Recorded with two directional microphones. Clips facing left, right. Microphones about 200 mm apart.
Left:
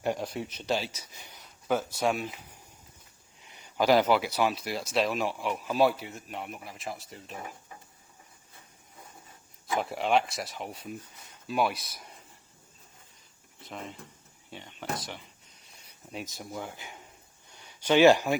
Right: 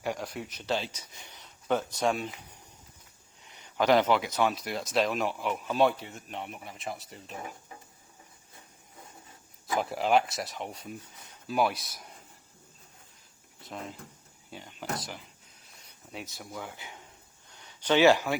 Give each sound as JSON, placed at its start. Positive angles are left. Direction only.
{"t": 0.7, "sound": "speech", "side_deg": 10}
{"t": 3.8, "sound": "speech", "side_deg": 10}
{"t": 9.7, "sound": "speech", "side_deg": 0}
{"t": 13.6, "sound": "speech", "side_deg": 0}
{"t": 16.1, "sound": "speech", "side_deg": 15}